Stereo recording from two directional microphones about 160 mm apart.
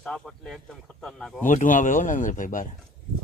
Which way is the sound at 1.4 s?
55° left (ahead or behind).